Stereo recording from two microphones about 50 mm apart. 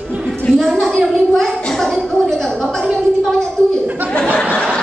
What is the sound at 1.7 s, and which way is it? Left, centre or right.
Gargling, centre.